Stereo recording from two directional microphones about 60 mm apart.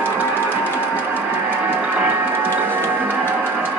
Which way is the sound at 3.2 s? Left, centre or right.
Left.